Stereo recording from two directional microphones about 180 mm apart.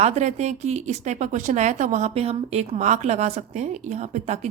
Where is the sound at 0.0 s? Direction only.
40° right (ahead or behind).